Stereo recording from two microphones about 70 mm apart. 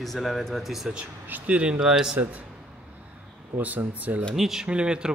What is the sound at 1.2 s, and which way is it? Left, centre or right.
Speech, right.